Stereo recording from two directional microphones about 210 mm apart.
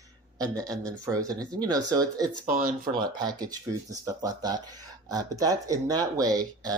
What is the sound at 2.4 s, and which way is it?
Speech, 40° right (ahead or behind).